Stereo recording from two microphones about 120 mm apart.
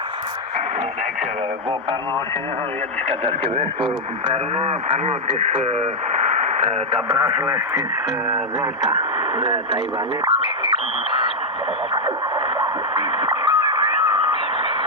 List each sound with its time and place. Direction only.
3.2 s speech: 50° right (ahead or behind)
7.4 s speech: 20° right (ahead or behind)
8.9 s speech: 50° right (ahead or behind)
12.5 s radio: 45° right (ahead or behind)